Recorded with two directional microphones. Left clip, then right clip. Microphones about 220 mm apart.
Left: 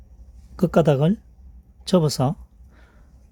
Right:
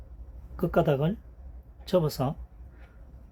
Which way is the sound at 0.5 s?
50° left (ahead or behind).